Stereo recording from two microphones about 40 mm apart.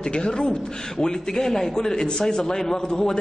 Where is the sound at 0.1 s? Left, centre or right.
Left.